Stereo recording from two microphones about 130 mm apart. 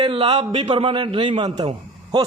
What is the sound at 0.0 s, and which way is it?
A man's voice, 45° right (ahead or behind).